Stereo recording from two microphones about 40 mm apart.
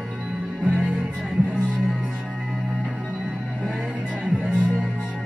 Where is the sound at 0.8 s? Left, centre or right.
Right.